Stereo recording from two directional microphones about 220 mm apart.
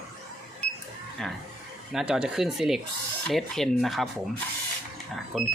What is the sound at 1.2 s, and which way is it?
Speech, centre (ahead or behind).